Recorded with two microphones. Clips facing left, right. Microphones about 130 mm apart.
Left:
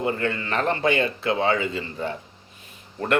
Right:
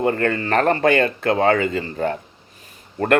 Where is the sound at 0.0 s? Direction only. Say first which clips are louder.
Right 5 dB; 55° right (ahead or behind).